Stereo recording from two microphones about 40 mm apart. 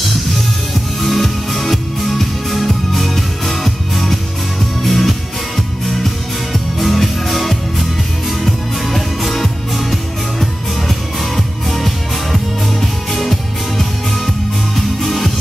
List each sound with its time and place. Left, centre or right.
1.0 s music: centre
6.8 s music: centre
11.3 s music: centre